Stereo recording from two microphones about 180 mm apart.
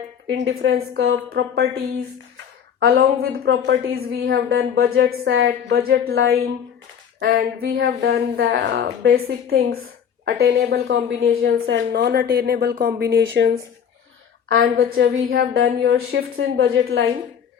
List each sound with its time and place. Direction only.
0.3 s a woman's voice: 75° right (ahead or behind)
2.8 s a woman's voice: 60° right (ahead or behind); by 13.5 s 80° right
14.5 s a woman's voice: 60° right (ahead or behind)
15.3 s a woman's voice: 75° right (ahead or behind)